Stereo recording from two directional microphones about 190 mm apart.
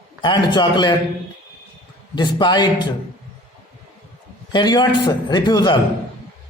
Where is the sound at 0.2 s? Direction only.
25° left (ahead or behind).